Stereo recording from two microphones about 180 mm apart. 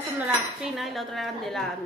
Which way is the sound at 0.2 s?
5° right (ahead or behind).